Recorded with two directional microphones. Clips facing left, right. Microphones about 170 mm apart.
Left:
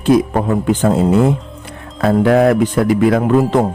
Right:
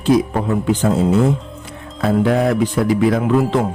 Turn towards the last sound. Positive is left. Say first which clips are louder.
# left 3 dB
turn(degrees=50)  # may be behind; listen again after turning